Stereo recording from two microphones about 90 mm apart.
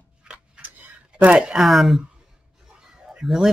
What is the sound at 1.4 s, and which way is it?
Speech, centre (ahead or behind).